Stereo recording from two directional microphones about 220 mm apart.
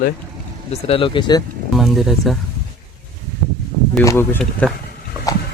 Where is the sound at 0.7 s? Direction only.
25° left (ahead or behind).